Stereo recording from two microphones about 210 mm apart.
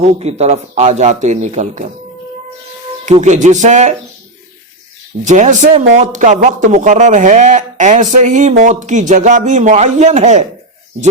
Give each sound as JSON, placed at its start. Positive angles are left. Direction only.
{"t": 0.0, "sound": "speech", "side_deg": -30}
{"t": 3.1, "sound": "speech", "side_deg": -35}
{"t": 5.2, "sound": "speech", "side_deg": -35}